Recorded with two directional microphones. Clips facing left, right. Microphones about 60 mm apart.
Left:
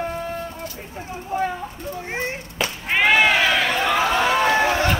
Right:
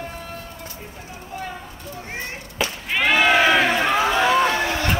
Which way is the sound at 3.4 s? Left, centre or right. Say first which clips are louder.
Right 2 dB; right.